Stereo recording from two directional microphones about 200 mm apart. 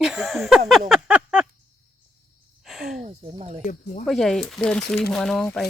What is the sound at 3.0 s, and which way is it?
Speech, 30° right (ahead or behind).